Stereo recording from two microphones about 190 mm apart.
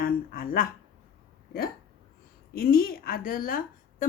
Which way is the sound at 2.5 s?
50° left (ahead or behind).